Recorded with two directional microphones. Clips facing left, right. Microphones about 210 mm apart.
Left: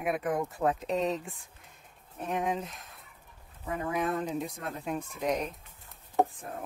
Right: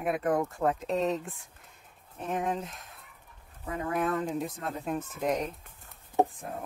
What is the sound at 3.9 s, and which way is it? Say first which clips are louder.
Speech: right 2 dB; centre (ahead or behind).